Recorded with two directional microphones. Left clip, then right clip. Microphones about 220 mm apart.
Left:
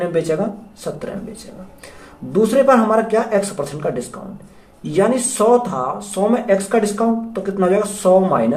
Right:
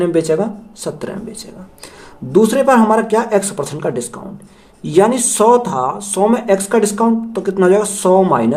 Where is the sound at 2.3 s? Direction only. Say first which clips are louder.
Right 2 dB; 55° right (ahead or behind).